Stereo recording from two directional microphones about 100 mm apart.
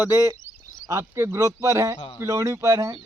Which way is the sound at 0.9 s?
30° right (ahead or behind).